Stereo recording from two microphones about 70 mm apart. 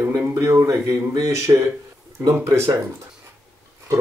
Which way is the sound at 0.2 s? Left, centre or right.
Right.